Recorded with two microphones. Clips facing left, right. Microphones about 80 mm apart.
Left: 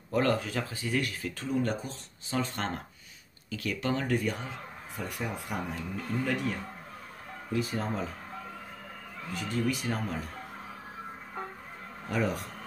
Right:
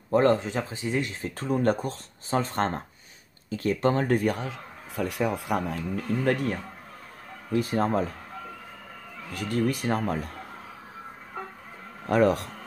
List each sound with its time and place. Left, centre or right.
0.1 s speech: right
1.3 s speech: right
6.2 s speech: right
9.3 s speech: right
12.1 s speech: right